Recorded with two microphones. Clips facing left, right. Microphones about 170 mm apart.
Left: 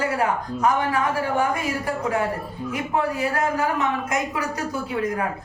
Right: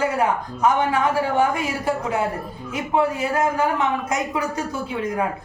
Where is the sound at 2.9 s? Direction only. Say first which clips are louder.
Right 4 dB; 25° right (ahead or behind).